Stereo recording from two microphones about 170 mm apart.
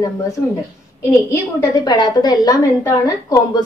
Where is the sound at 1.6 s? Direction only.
25° left (ahead or behind).